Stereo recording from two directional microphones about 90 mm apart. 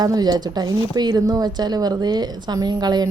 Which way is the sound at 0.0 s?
45° right (ahead or behind).